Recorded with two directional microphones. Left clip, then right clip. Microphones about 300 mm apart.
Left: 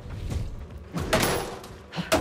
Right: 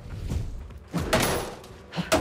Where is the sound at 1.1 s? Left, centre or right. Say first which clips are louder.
Even; centre.